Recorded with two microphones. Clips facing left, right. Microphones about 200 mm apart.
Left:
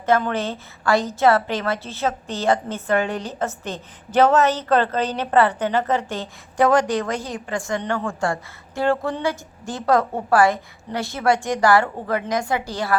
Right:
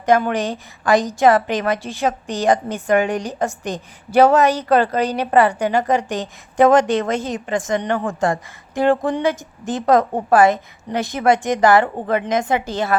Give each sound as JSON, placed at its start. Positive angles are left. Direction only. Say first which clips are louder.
{"t": 0.0, "sound": "a woman's voice", "louder": "right 3 dB", "side_deg": -15}